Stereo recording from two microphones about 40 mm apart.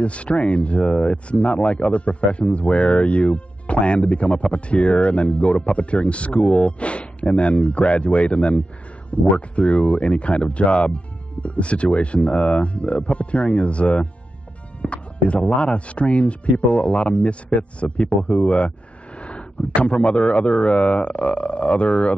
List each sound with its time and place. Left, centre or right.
0.0 s a man's voice: left